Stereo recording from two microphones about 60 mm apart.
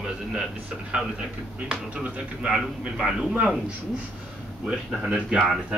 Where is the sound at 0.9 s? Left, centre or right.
Centre.